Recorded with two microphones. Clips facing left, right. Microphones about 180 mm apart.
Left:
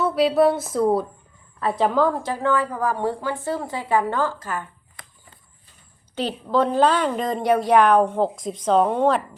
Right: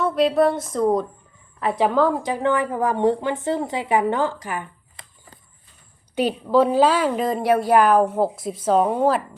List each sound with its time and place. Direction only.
0.0 s a woman's voice: 5° left (ahead or behind)
2.2 s a woman's voice: 15° right (ahead or behind)
6.1 s a woman's voice: 10° right (ahead or behind)